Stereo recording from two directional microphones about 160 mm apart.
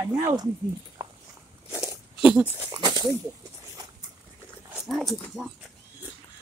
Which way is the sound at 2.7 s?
25° right (ahead or behind).